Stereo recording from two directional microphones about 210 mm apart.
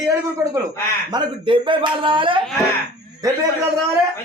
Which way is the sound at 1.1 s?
20° right (ahead or behind).